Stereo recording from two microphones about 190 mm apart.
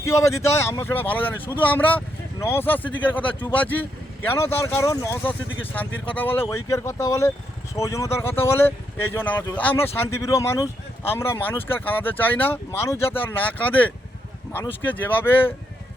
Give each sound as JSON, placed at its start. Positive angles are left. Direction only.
{"t": 0.0, "sound": "speech", "side_deg": 15}
{"t": 14.9, "sound": "speech", "side_deg": 10}